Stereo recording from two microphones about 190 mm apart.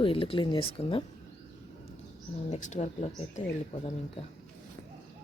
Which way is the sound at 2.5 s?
40° left (ahead or behind).